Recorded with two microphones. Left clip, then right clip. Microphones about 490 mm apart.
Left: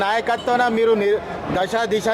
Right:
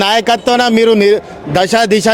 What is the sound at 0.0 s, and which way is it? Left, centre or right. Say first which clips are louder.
A man's voice: right 9 dB; right.